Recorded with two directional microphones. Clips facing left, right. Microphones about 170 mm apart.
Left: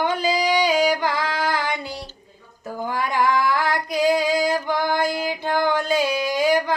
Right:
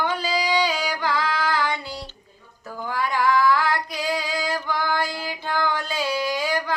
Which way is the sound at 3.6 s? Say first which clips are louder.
Left 3 dB; 45° left (ahead or behind).